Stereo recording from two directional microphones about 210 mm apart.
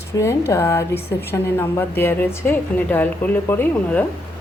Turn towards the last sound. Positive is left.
turn(degrees=10)  # may be behind; listen again after turning